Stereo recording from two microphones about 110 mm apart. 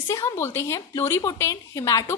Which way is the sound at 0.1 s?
25° left (ahead or behind).